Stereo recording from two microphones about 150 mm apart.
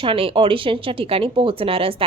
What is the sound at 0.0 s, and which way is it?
A woman's voice, 35° right (ahead or behind).